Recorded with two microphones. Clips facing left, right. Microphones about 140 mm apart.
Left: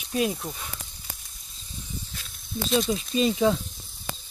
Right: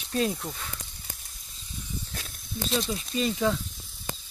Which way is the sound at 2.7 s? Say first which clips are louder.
Left 5 dB; 20° left (ahead or behind).